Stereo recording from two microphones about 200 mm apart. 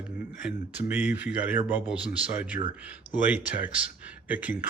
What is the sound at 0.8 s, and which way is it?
Speech, 10° right (ahead or behind).